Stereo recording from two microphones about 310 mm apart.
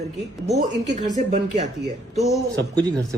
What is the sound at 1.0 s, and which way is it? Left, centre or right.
Speech, right.